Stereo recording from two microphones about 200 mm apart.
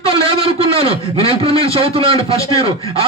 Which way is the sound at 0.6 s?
30° right (ahead or behind).